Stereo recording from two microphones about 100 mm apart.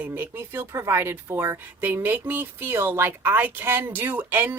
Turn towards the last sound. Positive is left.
turn(degrees=-20)  # may be behind; listen again after turning